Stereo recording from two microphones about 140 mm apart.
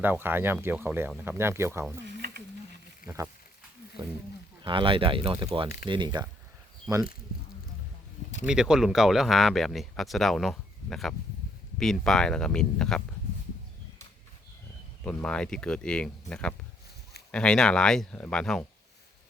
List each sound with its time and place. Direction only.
0.0 s speech: 15° right (ahead or behind)
3.0 s speech: 90° left
4.6 s speech: 35° right (ahead or behind)
8.4 s speech: 5° right (ahead or behind)
15.0 s speech: 5° left (ahead or behind)